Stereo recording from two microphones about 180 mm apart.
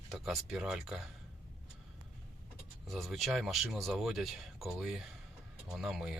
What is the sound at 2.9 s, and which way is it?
Speech, centre (ahead or behind).